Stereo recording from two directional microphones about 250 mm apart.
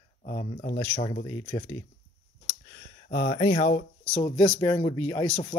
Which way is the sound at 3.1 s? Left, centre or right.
Left.